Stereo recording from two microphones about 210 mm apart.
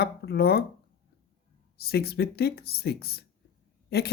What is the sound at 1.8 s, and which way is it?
Speech, 50° left (ahead or behind).